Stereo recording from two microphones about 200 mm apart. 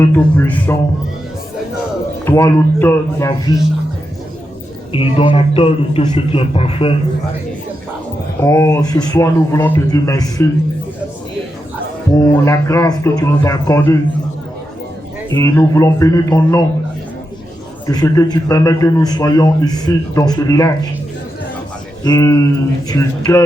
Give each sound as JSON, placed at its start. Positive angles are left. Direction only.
{"t": 0.0, "sound": "speech", "side_deg": 10}
{"t": 2.2, "sound": "speech", "side_deg": 15}
{"t": 4.9, "sound": "a man's voice", "side_deg": 25}
{"t": 8.4, "sound": "speech", "side_deg": 15}
{"t": 12.2, "sound": "speech", "side_deg": 15}
{"t": 15.3, "sound": "speech", "side_deg": 15}
{"t": 17.8, "sound": "a man's voice", "side_deg": 15}
{"t": 22.0, "sound": "speech", "side_deg": 20}